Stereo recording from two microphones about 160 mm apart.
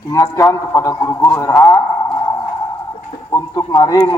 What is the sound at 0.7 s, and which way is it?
Speech, 15° left (ahead or behind).